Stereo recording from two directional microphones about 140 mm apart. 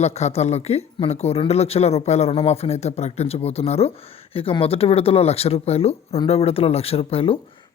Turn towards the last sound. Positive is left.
turn(degrees=40)  # may be behind; listen again after turning